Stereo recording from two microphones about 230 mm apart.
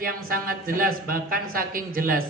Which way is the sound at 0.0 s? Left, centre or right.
Right.